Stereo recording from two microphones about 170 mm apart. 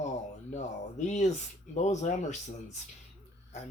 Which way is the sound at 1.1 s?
45° left (ahead or behind).